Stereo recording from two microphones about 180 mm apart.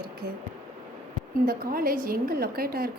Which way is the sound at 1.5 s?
55° right (ahead or behind).